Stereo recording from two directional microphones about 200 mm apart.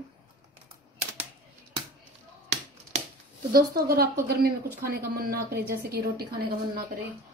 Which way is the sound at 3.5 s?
50° right (ahead or behind).